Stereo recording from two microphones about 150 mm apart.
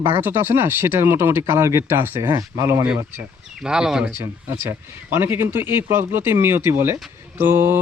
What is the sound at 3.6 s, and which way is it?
Speech, 5° right (ahead or behind).